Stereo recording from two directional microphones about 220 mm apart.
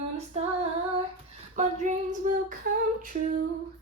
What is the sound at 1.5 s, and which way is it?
Speech, 35° right (ahead or behind).